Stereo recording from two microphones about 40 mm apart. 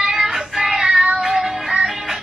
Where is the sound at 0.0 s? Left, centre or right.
Centre.